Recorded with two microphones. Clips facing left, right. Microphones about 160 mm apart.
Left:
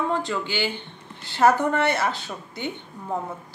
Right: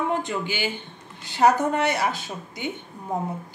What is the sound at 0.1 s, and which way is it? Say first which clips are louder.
A man's voice: even; 20° right (ahead or behind).